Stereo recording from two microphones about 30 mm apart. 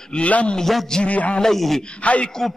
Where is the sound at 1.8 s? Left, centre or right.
Left.